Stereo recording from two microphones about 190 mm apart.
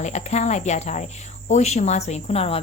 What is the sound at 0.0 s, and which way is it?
Cricket, 35° left (ahead or behind).